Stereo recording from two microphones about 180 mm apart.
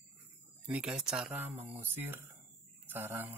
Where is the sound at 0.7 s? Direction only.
5° right (ahead or behind).